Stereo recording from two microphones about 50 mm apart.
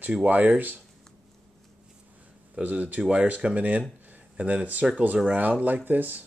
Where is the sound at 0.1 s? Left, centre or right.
Right.